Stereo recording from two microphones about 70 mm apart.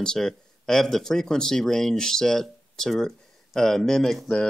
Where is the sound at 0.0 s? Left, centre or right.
Centre.